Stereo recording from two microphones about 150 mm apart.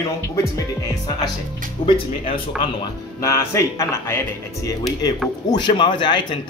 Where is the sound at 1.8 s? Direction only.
30° left (ahead or behind).